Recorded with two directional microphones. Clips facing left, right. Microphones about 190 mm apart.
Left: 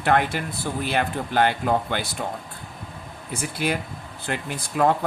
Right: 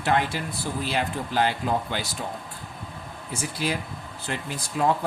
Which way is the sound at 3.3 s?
60° left (ahead or behind).